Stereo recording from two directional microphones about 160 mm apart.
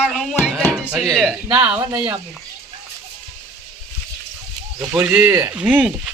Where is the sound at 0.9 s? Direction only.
Centre (ahead or behind).